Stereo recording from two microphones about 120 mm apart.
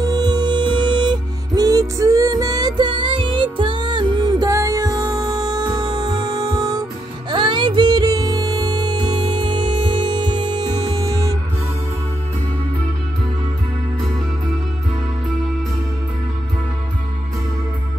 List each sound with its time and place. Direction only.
0.0 s music: 35° right (ahead or behind)